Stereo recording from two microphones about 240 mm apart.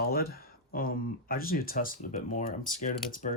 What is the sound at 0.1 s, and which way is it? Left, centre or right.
Speech, left.